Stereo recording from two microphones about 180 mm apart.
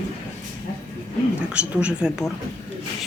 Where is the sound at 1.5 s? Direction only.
5° right (ahead or behind).